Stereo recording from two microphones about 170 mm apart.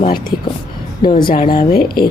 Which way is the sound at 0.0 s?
55° left (ahead or behind).